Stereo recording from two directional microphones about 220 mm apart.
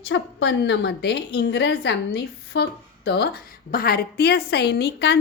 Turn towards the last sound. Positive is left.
turn(degrees=50)  # may be behind; listen again after turning